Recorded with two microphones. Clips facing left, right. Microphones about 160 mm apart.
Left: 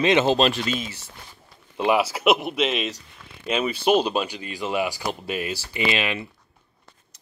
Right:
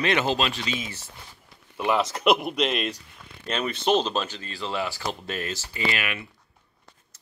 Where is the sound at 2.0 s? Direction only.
5° left (ahead or behind); by 6.2 s 25° left (ahead or behind).